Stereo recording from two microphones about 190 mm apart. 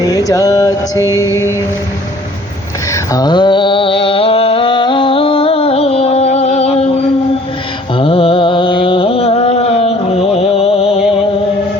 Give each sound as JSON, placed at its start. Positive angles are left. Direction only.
{"t": 0.1, "sound": "mantra", "side_deg": 20}
{"t": 2.9, "sound": "a sound", "side_deg": 20}
{"t": 7.9, "sound": "music", "side_deg": 30}